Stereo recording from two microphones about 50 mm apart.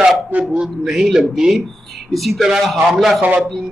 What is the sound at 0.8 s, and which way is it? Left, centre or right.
A man's voice, centre.